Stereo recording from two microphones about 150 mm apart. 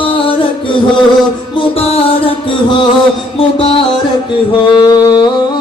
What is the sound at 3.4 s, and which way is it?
Music, 40° left (ahead or behind).